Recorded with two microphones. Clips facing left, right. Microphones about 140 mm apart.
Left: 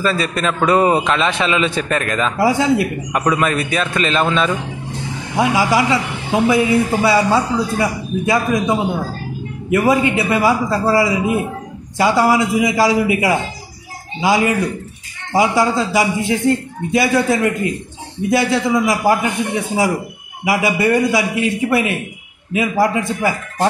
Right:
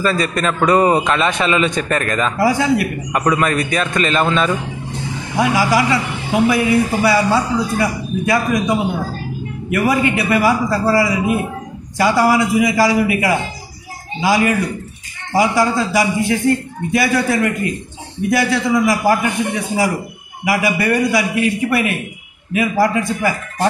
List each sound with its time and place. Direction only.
0.0 s a man's voice: centre (ahead or behind)
2.3 s a man's voice: 25° left (ahead or behind)
3.1 s a man's voice: 5° left (ahead or behind)
5.4 s a man's voice: 20° left (ahead or behind)